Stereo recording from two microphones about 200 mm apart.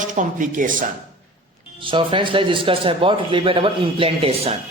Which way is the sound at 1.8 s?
25° right (ahead or behind).